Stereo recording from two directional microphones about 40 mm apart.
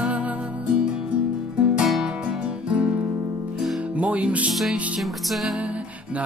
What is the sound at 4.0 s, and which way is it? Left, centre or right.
Music, right.